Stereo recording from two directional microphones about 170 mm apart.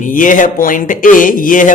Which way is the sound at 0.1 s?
50° left (ahead or behind).